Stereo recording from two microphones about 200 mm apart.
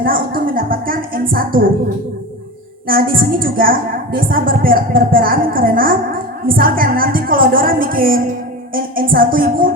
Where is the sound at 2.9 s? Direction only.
45° right (ahead or behind).